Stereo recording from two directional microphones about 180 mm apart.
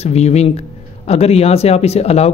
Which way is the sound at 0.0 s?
35° left (ahead or behind).